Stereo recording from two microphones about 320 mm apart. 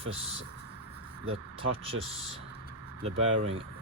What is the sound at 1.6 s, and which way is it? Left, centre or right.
Speech, centre.